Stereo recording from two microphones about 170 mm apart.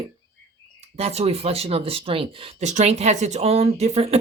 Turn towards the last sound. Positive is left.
turn(degrees=-40)  # may be behind; listen again after turning